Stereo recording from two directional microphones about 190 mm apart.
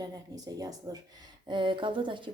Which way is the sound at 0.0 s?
20° right (ahead or behind).